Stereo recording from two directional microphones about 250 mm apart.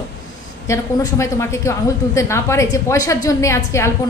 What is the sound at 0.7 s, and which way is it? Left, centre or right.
A woman's voice, centre.